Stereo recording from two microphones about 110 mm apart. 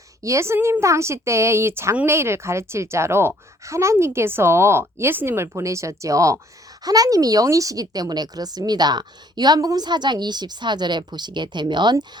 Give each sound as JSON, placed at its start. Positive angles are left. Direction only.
{"t": 0.2, "sound": "a woman's voice", "side_deg": -25}